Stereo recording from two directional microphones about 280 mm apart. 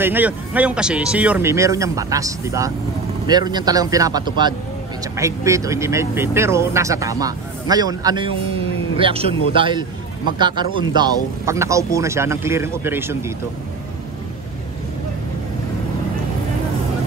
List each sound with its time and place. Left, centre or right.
0.0 s a man's voice: centre